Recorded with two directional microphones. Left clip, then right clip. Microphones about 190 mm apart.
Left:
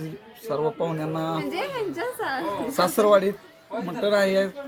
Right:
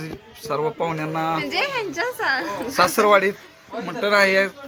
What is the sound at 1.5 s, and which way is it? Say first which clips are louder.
Speech: right 5 dB; 20° left (ahead or behind).